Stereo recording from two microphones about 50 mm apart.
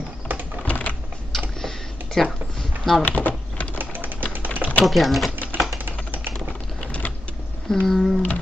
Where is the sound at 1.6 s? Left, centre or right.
Centre.